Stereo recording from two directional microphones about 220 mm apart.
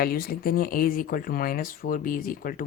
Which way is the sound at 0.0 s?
40° left (ahead or behind).